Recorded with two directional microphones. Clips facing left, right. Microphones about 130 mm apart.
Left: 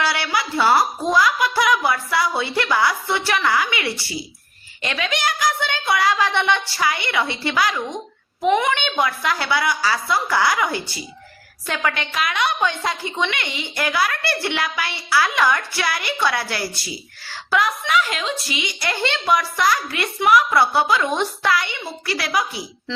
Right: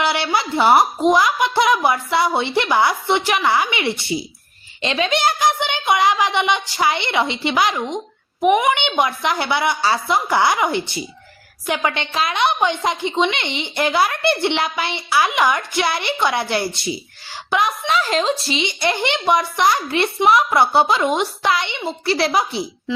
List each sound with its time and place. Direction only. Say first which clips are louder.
0.0 s a woman's voice: right 3 dB; 25° right (ahead or behind)